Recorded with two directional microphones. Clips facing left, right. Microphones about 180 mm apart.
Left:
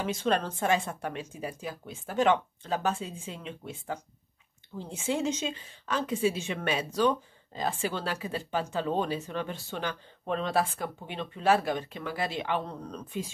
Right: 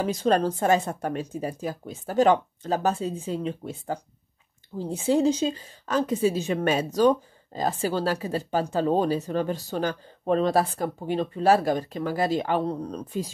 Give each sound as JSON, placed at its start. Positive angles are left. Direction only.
{"t": 0.0, "sound": "a woman's voice", "side_deg": -40}